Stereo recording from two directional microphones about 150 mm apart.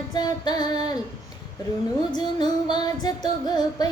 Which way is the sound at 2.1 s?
30° left (ahead or behind).